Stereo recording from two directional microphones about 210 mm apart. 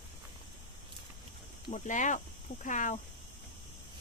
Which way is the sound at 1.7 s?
35° left (ahead or behind).